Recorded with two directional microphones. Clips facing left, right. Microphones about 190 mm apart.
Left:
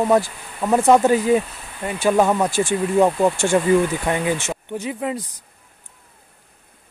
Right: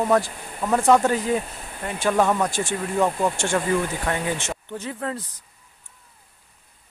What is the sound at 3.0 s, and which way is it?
Speech, 30° left (ahead or behind).